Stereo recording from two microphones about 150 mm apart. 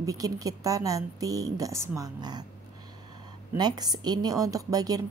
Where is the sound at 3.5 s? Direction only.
25° right (ahead or behind).